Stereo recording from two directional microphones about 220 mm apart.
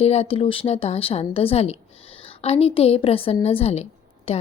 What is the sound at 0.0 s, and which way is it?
Speech, 30° left (ahead or behind).